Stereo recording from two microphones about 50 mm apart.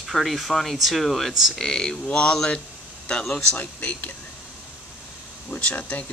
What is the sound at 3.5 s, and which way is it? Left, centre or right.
Speech, left.